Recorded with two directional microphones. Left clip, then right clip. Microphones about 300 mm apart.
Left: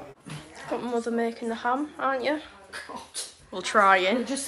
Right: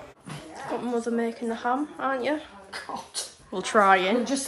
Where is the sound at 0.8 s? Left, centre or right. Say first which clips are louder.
Even; centre.